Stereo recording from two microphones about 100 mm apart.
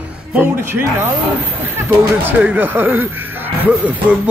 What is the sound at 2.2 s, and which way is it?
Speech, 20° right (ahead or behind).